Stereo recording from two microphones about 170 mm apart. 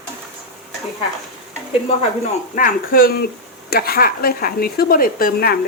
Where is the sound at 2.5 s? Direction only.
55° left (ahead or behind).